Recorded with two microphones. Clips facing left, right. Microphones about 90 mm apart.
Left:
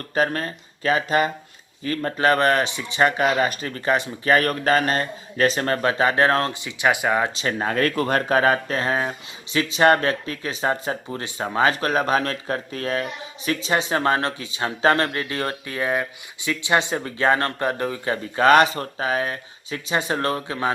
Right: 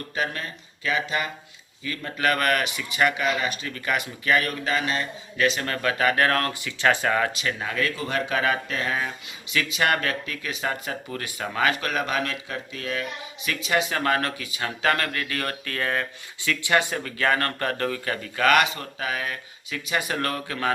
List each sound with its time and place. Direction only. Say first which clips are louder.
0.1 s speech: left 7 dB; 40° left (ahead or behind); by 7.3 s 15° left (ahead or behind)
7.3 s speech: left 5 dB; 40° left (ahead or behind); by 20.7 s 20° left (ahead or behind)